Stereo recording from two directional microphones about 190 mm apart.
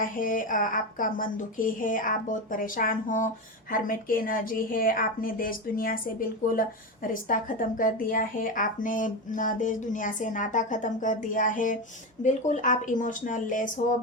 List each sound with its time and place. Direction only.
0.0 s speech: 45° left (ahead or behind)